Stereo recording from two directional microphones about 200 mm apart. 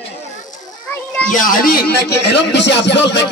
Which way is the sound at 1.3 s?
45° left (ahead or behind).